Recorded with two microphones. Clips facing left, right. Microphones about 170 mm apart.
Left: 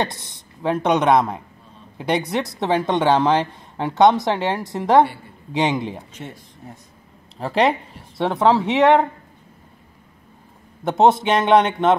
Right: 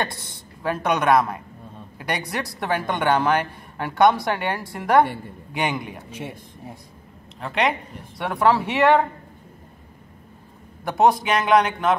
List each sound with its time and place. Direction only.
0.0 s speech: 20° left (ahead or behind)
6.1 s speech: 10° right (ahead or behind)
7.3 s speech: 35° left (ahead or behind)
10.8 s speech: 25° left (ahead or behind)